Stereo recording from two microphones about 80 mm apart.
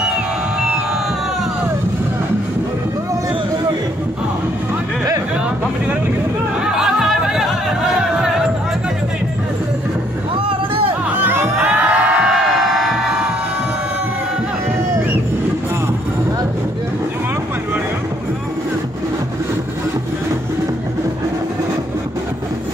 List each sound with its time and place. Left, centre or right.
6.6 s music: centre
11.2 s music: right
11.6 s music: centre
12.3 s music: centre